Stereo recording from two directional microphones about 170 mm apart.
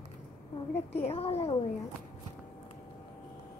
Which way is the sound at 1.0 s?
35° left (ahead or behind).